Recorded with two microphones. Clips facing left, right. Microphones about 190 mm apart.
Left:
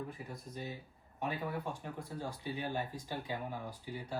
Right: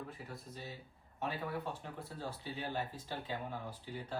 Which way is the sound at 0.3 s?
15° left (ahead or behind).